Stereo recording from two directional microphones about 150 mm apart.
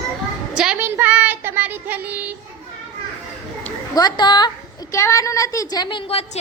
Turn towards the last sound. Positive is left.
turn(degrees=35)  # may be behind; listen again after turning